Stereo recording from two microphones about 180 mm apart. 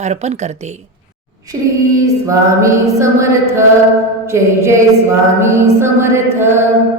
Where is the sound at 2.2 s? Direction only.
15° right (ahead or behind).